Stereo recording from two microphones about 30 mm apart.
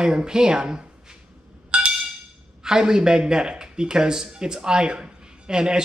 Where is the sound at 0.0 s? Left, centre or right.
Right.